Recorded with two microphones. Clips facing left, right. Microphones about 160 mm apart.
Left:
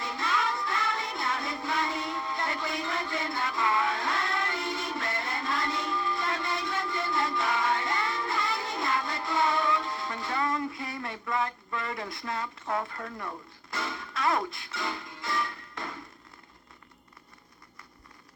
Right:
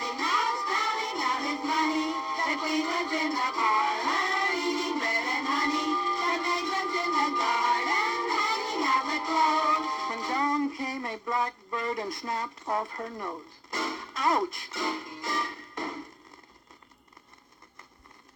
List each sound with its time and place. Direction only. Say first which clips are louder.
0.0 s music: even; 20° right (ahead or behind)
10.7 s a sound: right 4 dB; 40° right (ahead or behind)
10.9 s speech: right 1 dB; 20° right (ahead or behind)
13.7 s music: right 1 dB; 20° right (ahead or behind)